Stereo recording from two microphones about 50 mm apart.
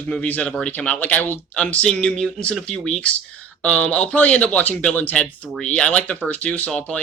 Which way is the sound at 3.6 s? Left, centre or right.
Centre.